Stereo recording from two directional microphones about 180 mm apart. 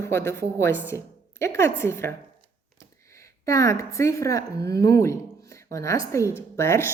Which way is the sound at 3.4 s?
15° left (ahead or behind).